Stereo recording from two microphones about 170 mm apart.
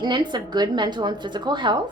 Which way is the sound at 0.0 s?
25° right (ahead or behind).